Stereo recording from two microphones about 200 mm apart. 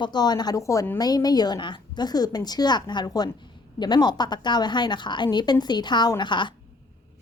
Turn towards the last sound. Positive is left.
turn(degrees=25)  # may be behind; listen again after turning